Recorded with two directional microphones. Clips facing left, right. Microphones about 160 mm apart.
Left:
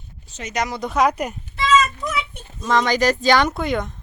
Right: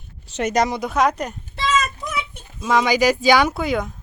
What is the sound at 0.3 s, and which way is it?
Speech, 75° right (ahead or behind).